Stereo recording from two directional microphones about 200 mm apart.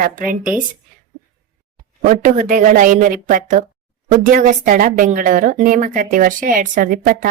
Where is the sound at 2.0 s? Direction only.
40° right (ahead or behind).